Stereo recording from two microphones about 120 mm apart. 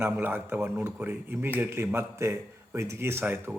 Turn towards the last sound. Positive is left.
turn(degrees=-15)  # may be behind; listen again after turning